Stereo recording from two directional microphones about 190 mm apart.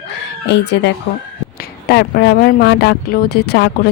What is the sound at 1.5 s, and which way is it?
A woman's voice, 55° left (ahead or behind).